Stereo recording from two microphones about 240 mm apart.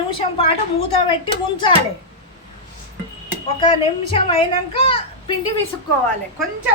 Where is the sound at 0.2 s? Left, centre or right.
Left.